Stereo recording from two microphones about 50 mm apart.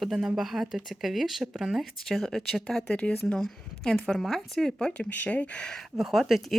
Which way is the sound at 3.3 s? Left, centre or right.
Centre.